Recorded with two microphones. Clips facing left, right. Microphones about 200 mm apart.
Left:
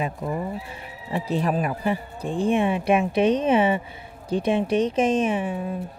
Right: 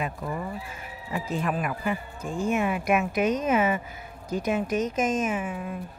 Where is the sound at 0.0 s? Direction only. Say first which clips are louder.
Left 4 dB; 25° left (ahead or behind).